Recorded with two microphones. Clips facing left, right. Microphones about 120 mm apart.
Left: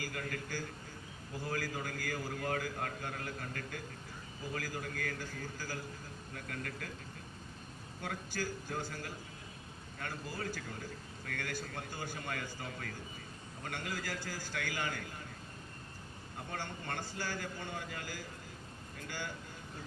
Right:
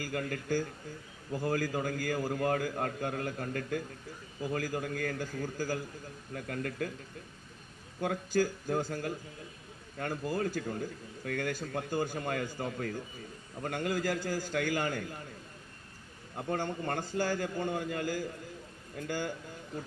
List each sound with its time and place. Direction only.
0.1 s a man's voice: 40° right (ahead or behind)
8.0 s a man's voice: 40° right (ahead or behind)
16.5 s a man's voice: 40° right (ahead or behind)